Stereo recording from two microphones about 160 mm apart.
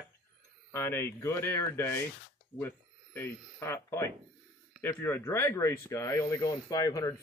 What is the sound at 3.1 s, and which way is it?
Speech, 15° left (ahead or behind).